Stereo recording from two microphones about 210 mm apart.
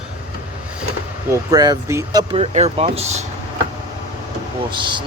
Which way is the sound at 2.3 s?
30° right (ahead or behind).